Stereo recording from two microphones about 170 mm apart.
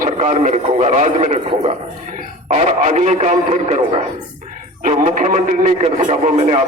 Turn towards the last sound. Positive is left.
turn(degrees=-45)  # may be behind; listen again after turning